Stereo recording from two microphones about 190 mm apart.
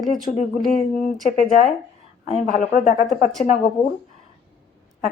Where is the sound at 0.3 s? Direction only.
40° left (ahead or behind).